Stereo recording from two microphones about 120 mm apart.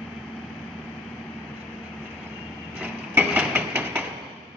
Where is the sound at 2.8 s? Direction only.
10° right (ahead or behind).